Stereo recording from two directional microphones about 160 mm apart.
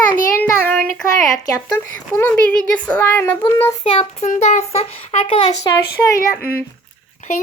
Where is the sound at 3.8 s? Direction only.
35° left (ahead or behind).